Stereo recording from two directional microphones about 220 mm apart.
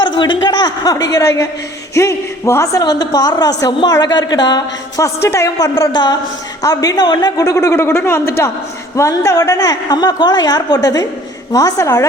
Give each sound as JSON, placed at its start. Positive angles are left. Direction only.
{"t": 0.0, "sound": "a man's voice", "side_deg": 20}